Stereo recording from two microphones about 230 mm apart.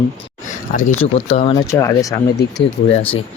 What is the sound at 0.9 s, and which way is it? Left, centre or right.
Speech, left.